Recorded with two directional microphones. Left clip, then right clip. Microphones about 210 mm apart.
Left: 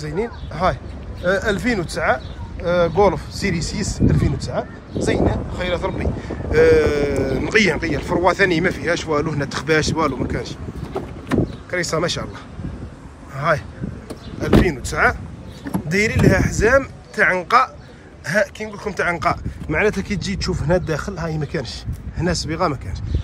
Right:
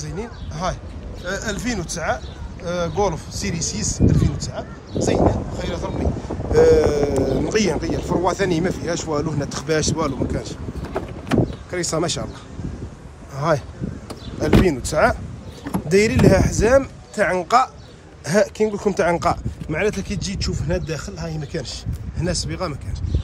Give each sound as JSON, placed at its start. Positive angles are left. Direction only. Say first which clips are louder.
{"t": 0.0, "sound": "speech", "louder": "left 7 dB", "side_deg": -10}
{"t": 11.7, "sound": "speech", "louder": "left 3 dB", "side_deg": -15}
{"t": 13.4, "sound": "speech", "louder": "left 2 dB", "side_deg": -25}
{"t": 14.7, "sound": "speech", "louder": "even", "side_deg": -30}